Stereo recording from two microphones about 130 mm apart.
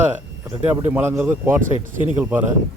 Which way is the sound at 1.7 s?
40° left (ahead or behind).